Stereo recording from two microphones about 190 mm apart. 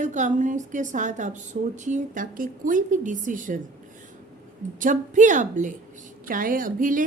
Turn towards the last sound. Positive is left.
turn(degrees=-45)  # may be behind; listen again after turning